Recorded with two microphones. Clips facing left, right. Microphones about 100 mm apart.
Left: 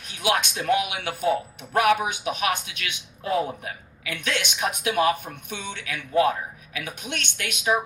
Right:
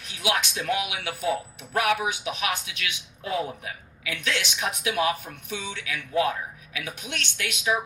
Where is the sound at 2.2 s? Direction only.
50° left (ahead or behind).